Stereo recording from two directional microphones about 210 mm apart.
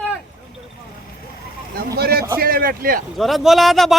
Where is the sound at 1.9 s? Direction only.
50° right (ahead or behind).